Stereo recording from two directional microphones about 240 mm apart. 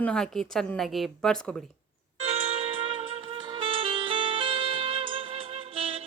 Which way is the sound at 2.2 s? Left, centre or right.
Right.